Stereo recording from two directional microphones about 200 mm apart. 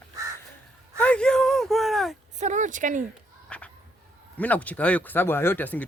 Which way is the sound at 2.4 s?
35° right (ahead or behind).